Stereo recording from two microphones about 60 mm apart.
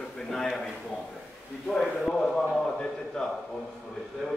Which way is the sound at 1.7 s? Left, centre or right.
Centre.